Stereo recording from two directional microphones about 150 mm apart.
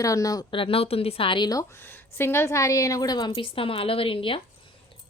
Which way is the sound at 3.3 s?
35° left (ahead or behind).